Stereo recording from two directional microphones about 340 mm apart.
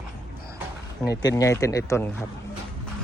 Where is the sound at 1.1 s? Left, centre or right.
Left.